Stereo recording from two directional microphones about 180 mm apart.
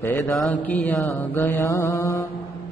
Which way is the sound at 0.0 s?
10° left (ahead or behind).